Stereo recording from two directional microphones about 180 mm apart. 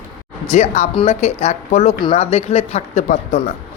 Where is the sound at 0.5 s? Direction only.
40° left (ahead or behind).